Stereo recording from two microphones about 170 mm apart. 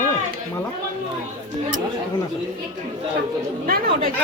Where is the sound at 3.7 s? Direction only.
60° right (ahead or behind).